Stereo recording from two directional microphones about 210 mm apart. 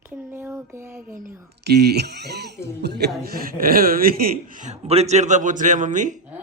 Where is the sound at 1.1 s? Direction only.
45° right (ahead or behind).